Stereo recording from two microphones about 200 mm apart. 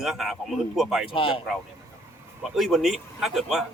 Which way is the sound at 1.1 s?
25° left (ahead or behind).